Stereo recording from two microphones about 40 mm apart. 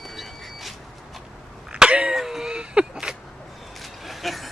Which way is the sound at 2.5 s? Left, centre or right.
Right.